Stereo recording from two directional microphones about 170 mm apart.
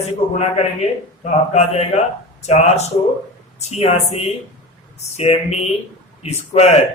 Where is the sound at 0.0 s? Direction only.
40° left (ahead or behind).